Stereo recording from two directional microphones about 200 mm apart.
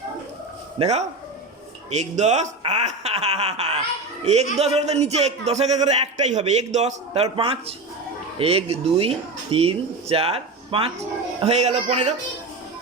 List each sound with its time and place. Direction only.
0.8 s a man's voice: 35° right (ahead or behind)